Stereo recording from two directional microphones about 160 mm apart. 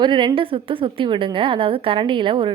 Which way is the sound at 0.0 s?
30° right (ahead or behind).